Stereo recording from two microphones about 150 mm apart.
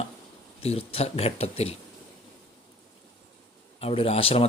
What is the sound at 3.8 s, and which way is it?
Speech, 40° left (ahead or behind).